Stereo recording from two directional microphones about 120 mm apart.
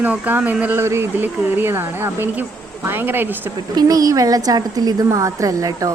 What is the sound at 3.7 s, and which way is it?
A woman's voice, 30° right (ahead or behind).